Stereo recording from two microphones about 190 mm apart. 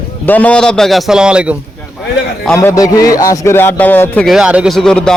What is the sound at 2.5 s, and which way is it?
A man's voice, 15° left (ahead or behind).